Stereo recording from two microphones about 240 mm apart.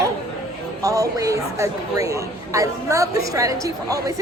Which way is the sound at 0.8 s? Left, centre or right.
Centre.